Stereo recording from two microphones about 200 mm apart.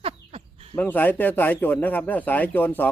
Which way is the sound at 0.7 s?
10° left (ahead or behind).